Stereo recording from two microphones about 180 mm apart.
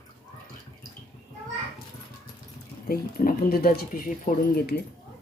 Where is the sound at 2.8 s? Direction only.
55° left (ahead or behind).